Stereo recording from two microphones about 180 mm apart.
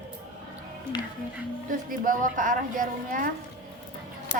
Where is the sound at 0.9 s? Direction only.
25° left (ahead or behind).